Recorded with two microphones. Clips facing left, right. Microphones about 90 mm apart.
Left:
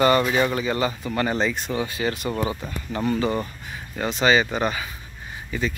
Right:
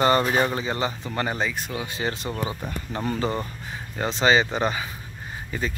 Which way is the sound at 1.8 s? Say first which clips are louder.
Left 3 dB; 25° right (ahead or behind).